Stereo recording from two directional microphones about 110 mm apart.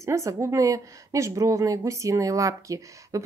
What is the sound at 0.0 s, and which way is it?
Speech, 30° right (ahead or behind).